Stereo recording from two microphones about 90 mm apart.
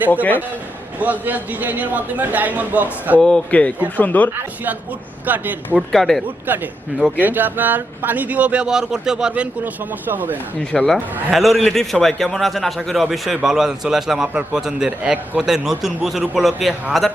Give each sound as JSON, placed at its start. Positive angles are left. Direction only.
{"t": 0.1, "sound": "a man's voice", "side_deg": 20}
{"t": 0.9, "sound": "a man's voice", "side_deg": -15}
{"t": 3.2, "sound": "a man's voice", "side_deg": 10}
{"t": 5.2, "sound": "speech", "side_deg": -20}
{"t": 5.9, "sound": "a man's voice", "side_deg": 0}
{"t": 6.5, "sound": "speech", "side_deg": -20}
{"t": 10.3, "sound": "a man's voice", "side_deg": 10}